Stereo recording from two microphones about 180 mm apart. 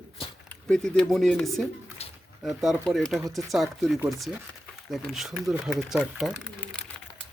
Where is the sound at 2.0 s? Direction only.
35° left (ahead or behind).